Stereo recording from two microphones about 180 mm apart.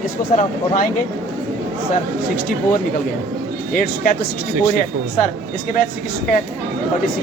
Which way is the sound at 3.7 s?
55° left (ahead or behind).